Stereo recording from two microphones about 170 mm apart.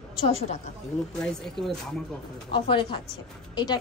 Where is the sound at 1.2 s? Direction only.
5° left (ahead or behind).